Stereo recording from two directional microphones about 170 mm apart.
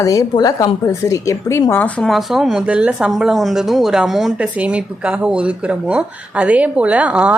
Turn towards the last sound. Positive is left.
turn(degrees=-10)  # may be behind; listen again after turning